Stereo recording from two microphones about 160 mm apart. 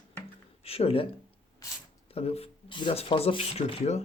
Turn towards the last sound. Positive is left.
turn(degrees=40)  # may be behind; listen again after turning